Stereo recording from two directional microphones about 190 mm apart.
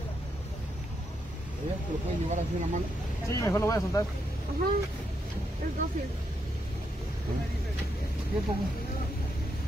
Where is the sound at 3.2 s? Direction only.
15° left (ahead or behind).